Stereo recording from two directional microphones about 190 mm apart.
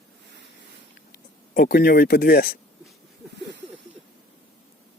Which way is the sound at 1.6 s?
50° left (ahead or behind).